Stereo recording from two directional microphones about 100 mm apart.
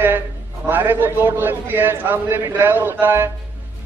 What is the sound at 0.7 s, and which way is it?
A man's voice, 20° right (ahead or behind).